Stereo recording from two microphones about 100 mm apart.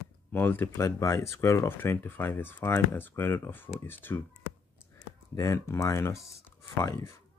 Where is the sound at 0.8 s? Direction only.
30° left (ahead or behind).